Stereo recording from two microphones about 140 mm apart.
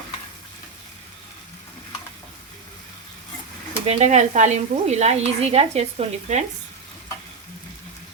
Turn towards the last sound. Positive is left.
turn(degrees=-50)  # may be behind; listen again after turning